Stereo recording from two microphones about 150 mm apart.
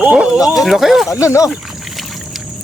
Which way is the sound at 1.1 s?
20° left (ahead or behind).